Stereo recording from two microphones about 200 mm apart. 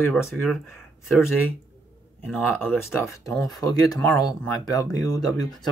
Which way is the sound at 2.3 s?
Centre (ahead or behind).